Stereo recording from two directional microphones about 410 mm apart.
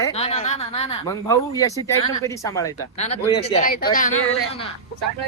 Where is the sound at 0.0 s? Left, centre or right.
Centre.